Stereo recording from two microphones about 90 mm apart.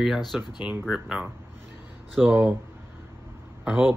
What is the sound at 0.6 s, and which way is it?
Speech, 15° right (ahead or behind).